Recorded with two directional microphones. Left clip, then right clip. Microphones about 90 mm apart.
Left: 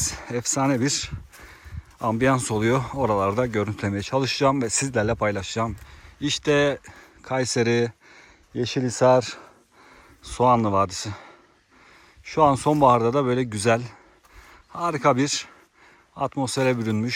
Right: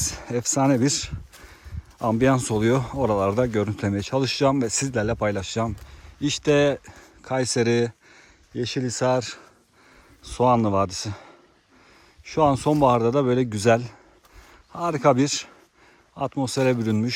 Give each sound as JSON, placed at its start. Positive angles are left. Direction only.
{"t": 0.0, "sound": "speech", "side_deg": -35}
{"t": 5.2, "sound": "speech", "side_deg": -35}
{"t": 8.5, "sound": "speech", "side_deg": 0}
{"t": 10.2, "sound": "speech", "side_deg": -30}